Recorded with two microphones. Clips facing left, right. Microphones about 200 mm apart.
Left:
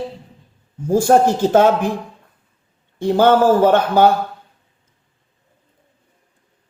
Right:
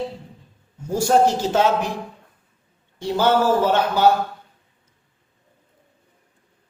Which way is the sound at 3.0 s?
50° left (ahead or behind).